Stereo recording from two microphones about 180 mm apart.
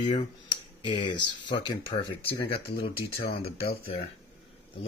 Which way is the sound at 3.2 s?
60° left (ahead or behind).